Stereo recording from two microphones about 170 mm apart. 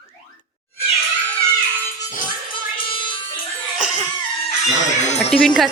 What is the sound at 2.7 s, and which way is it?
Music, 30° left (ahead or behind).